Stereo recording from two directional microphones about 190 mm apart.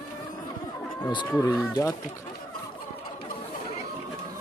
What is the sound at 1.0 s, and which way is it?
Speech, 20° left (ahead or behind).